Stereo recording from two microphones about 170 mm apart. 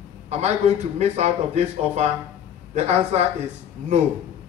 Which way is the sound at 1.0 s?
40° right (ahead or behind).